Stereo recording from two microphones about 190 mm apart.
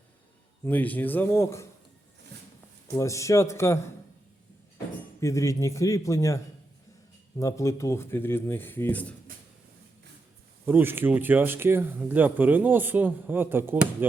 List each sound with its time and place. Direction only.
0.6 s speech: 10° left (ahead or behind)
3.0 s speech: 15° left (ahead or behind)
5.2 s speech: 15° left (ahead or behind)
10.7 s speech: 10° right (ahead or behind)